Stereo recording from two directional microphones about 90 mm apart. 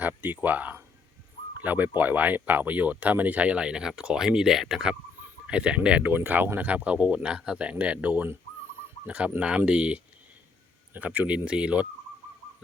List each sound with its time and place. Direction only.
0.0 s speech: 20° right (ahead or behind)